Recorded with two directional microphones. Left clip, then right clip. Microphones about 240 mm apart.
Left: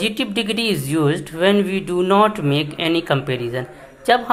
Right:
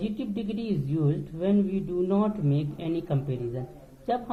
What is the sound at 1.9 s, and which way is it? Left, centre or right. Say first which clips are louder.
Speech: left 11 dB; left.